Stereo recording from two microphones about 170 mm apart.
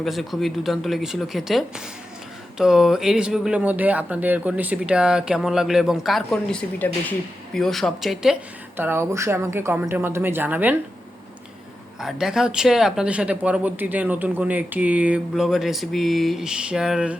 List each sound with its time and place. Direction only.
0.0 s speech: centre (ahead or behind)
11.9 s speech: 5° right (ahead or behind)